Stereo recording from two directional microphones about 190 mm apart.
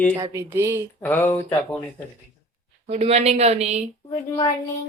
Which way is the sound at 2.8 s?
35° right (ahead or behind).